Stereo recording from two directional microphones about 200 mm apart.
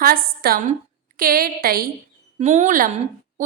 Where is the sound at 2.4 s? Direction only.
35° right (ahead or behind).